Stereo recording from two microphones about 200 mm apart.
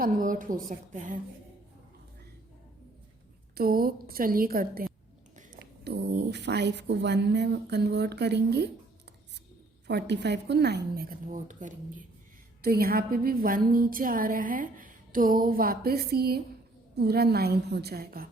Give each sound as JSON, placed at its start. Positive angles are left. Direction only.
{"t": 0.0, "sound": "a woman's voice", "side_deg": -40}
{"t": 3.5, "sound": "a woman's voice", "side_deg": -50}
{"t": 9.8, "sound": "a woman's voice", "side_deg": -60}